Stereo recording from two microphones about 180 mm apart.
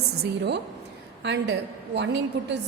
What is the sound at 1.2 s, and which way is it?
A woman's voice, 75° right (ahead or behind).